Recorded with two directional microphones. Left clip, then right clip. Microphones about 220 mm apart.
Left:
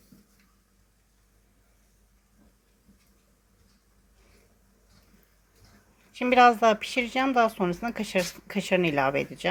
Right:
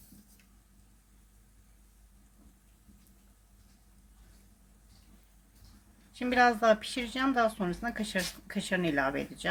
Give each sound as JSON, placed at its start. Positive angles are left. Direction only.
{"t": 6.1, "sound": "speech", "side_deg": 20}